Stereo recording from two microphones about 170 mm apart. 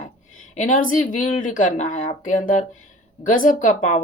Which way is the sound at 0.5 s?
45° left (ahead or behind).